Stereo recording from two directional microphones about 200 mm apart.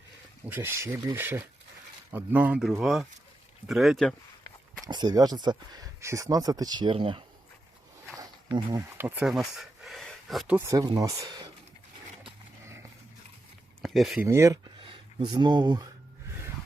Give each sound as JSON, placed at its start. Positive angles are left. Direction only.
{"t": 0.4, "sound": "speech", "side_deg": -10}
{"t": 4.9, "sound": "speech", "side_deg": -20}
{"t": 8.2, "sound": "a sound", "side_deg": -15}
{"t": 10.8, "sound": "speech", "side_deg": -20}
{"t": 13.8, "sound": "speech", "side_deg": 0}
{"t": 14.3, "sound": "speech", "side_deg": -15}